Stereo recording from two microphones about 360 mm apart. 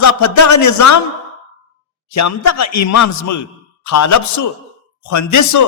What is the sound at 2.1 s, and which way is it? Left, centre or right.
A man's voice, left.